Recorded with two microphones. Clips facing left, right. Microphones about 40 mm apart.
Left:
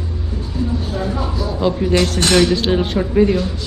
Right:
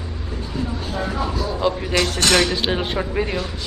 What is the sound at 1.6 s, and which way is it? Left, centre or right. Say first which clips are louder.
A man's voice: left 5 dB; centre.